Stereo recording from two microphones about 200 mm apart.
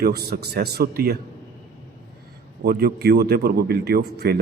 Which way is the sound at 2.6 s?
50° right (ahead or behind).